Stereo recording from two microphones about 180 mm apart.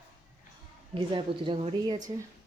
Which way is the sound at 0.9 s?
30° right (ahead or behind).